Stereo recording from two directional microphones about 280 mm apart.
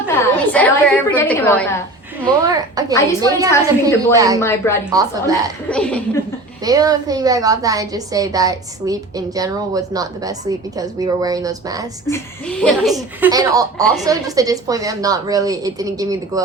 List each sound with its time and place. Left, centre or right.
0.1 s a woman's voice: centre
2.2 s a woman's voice: centre
4.4 s speech: centre
4.9 s a woman's voice: centre
5.6 s a woman's voice: centre
6.6 s a woman's voice: centre
12.1 s a woman's voice: centre